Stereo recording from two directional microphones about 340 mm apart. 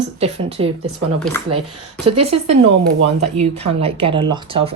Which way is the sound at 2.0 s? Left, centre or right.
Right.